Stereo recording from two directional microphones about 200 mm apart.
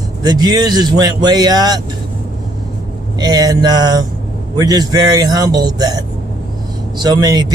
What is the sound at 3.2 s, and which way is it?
Speech, 20° right (ahead or behind).